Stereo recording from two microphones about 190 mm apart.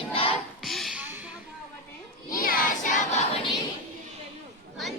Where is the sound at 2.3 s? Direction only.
50° left (ahead or behind).